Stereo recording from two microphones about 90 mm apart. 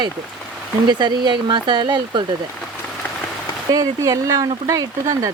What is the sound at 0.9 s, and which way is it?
Speech, 55° right (ahead or behind).